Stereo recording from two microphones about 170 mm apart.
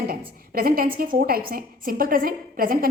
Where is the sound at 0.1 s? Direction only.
60° right (ahead or behind).